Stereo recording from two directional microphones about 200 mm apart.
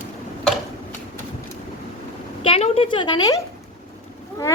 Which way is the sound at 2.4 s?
30° left (ahead or behind).